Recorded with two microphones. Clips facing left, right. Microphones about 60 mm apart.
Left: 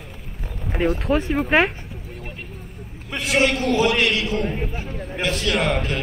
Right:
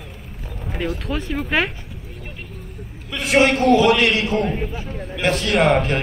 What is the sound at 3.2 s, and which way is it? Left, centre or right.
A man's voice, right.